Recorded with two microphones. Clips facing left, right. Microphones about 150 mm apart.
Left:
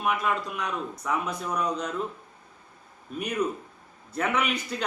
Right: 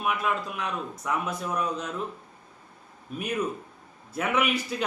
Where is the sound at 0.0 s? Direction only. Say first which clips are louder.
Left 1 dB; 5° right (ahead or behind).